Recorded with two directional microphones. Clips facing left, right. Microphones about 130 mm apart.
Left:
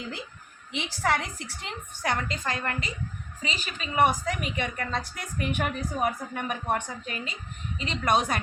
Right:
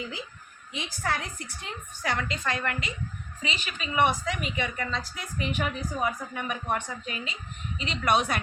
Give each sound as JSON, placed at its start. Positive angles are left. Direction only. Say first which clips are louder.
{"t": 0.7, "sound": "a woman's voice", "louder": "left 4 dB", "side_deg": 85}
{"t": 2.2, "sound": "a woman's voice", "louder": "right 1 dB", "side_deg": 35}